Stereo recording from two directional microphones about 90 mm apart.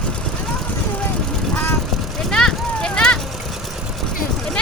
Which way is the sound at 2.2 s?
10° left (ahead or behind).